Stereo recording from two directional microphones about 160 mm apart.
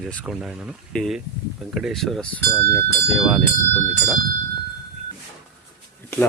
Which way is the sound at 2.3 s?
15° left (ahead or behind).